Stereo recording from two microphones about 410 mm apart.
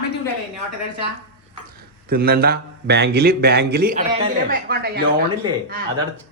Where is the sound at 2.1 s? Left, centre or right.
Right.